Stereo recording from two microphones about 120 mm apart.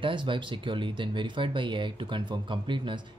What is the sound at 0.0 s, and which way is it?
Speech, 45° right (ahead or behind).